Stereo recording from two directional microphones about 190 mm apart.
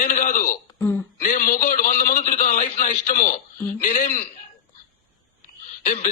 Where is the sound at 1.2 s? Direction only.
45° left (ahead or behind).